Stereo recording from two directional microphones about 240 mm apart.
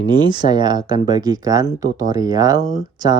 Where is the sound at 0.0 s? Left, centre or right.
Centre.